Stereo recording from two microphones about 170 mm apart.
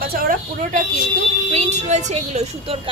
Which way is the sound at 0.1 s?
55° right (ahead or behind).